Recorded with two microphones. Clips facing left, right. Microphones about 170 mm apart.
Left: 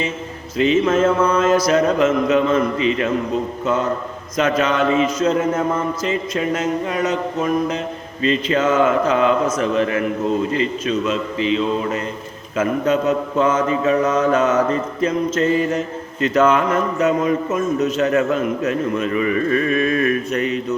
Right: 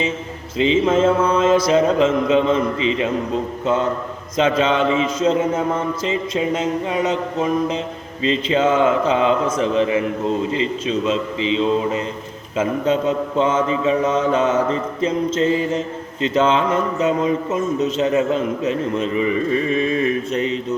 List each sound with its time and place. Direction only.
0.6 s speech: 25° right (ahead or behind)
4.4 s speech: 25° right (ahead or behind)